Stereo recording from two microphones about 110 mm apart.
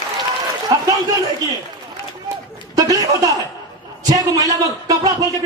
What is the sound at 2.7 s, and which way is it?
A man's voice, 35° right (ahead or behind).